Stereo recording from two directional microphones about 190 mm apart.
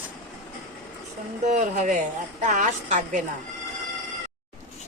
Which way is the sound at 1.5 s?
40° right (ahead or behind).